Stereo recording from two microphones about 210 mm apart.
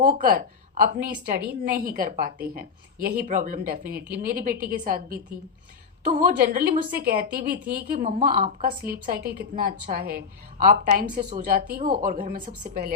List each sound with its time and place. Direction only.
0.0 s a woman's voice: 40° right (ahead or behind)